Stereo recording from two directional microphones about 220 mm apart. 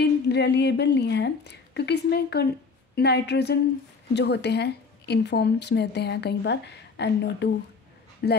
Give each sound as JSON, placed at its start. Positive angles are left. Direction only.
{"t": 0.0, "sound": "a woman's voice", "side_deg": 50}